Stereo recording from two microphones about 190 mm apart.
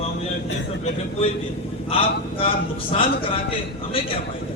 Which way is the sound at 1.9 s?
30° left (ahead or behind).